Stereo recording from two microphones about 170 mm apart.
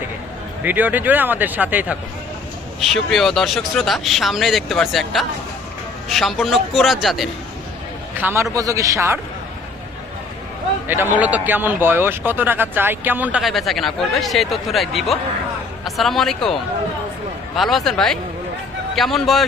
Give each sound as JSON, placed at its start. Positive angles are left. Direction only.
{"t": 0.6, "sound": "a man's voice", "side_deg": -10}
{"t": 2.9, "sound": "speech", "side_deg": 0}
{"t": 8.2, "sound": "a man's voice", "side_deg": -15}
{"t": 10.8, "sound": "a man's voice", "side_deg": -10}
{"t": 17.6, "sound": "speech", "side_deg": 0}